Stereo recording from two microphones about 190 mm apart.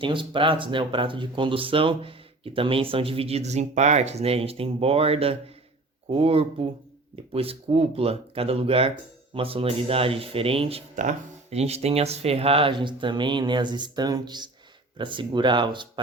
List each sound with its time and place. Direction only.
0.0 s speech: 25° right (ahead or behind)